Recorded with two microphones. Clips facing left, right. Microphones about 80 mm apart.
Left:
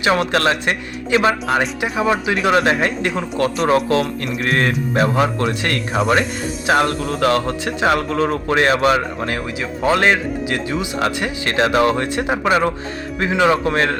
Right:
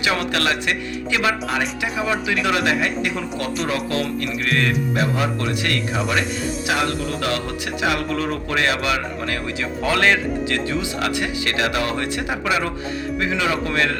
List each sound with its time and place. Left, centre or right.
0.0 s music: left
9.3 s speech: left
13.1 s music: left